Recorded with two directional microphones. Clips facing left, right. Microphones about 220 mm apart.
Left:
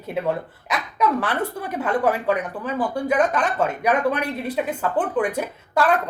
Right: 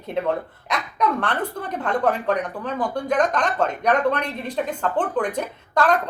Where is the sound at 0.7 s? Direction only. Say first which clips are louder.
Left 1 dB; 5° left (ahead or behind).